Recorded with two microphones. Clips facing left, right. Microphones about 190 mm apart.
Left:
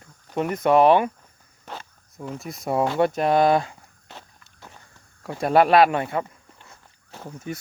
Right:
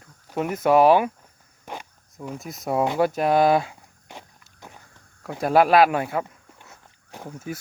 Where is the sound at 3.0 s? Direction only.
5° right (ahead or behind).